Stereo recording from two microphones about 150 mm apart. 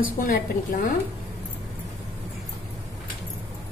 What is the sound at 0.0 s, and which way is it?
Speech, 70° left (ahead or behind).